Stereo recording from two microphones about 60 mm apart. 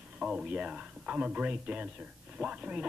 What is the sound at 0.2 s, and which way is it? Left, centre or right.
Speech, centre.